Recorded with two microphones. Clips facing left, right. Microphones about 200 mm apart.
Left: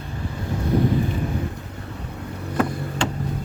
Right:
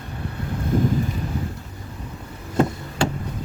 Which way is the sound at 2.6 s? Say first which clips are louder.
Right 3 dB; 25° right (ahead or behind).